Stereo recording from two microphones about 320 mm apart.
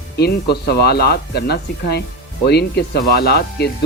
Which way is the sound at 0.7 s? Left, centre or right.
Left.